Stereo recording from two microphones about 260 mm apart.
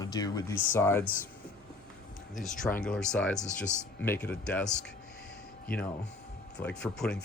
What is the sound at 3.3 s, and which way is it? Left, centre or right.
Speech, left.